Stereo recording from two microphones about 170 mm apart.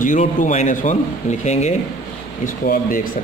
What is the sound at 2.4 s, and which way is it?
Speech, 55° left (ahead or behind).